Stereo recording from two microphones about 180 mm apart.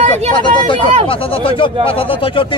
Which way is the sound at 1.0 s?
30° left (ahead or behind).